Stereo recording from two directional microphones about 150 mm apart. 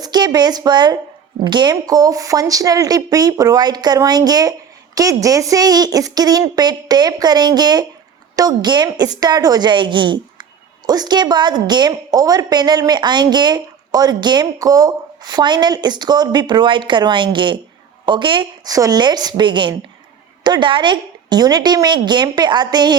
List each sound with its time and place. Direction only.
0.0 s a woman's voice: 25° right (ahead or behind)